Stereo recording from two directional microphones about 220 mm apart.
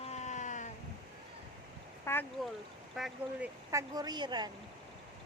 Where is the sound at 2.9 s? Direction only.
Centre (ahead or behind).